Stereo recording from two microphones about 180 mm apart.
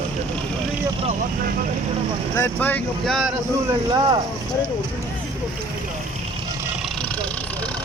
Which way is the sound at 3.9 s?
25° right (ahead or behind).